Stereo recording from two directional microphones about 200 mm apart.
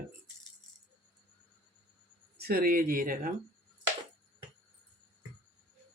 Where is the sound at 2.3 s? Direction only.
50° right (ahead or behind).